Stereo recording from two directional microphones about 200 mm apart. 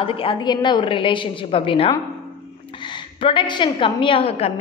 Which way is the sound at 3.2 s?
25° left (ahead or behind).